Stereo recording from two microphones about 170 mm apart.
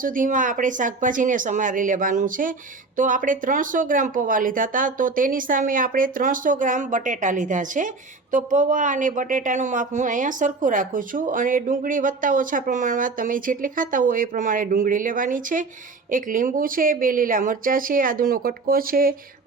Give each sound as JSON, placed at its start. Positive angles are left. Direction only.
{"t": 0.0, "sound": "a woman's voice", "side_deg": -50}